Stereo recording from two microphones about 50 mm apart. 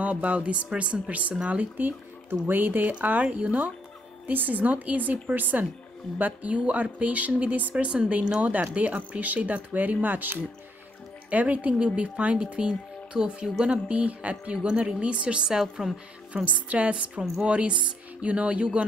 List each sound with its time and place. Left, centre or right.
0.0 s a woman's voice: right
2.2 s speech: right
2.9 s a woman's voice: right; by 15.9 s centre
16.4 s speech: right